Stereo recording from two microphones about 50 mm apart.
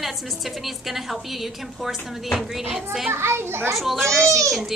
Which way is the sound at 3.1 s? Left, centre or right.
Right.